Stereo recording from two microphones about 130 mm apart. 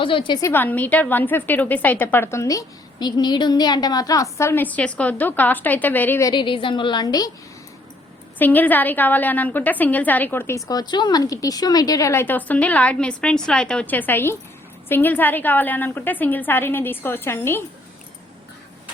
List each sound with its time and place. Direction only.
0.0 s a woman's voice: 40° left (ahead or behind)
0.4 s a woman's voice: 15° left (ahead or behind)
6.2 s a woman's voice: 40° left (ahead or behind)
8.4 s a woman's voice: 15° left (ahead or behind)
10.7 s a woman's voice: 30° left (ahead or behind)